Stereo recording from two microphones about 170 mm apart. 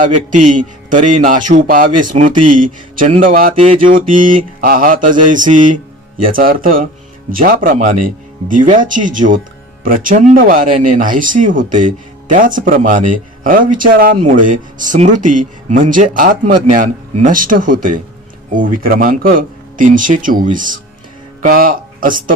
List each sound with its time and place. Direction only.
0.0 s speech: 50° right (ahead or behind)
3.7 s mantra: 35° right (ahead or behind)
4.0 s speech: 50° right (ahead or behind)
14.2 s speech: 50° right (ahead or behind)